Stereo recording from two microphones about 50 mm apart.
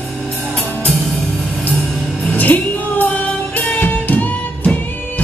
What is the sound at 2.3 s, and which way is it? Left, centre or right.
Music, left.